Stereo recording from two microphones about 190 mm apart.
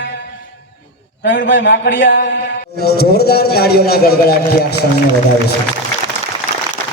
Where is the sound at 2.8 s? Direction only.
55° left (ahead or behind).